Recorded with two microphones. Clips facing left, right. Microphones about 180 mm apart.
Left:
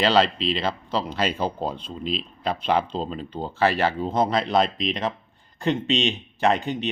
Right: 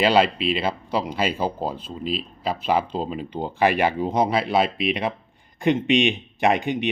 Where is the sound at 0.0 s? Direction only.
10° right (ahead or behind).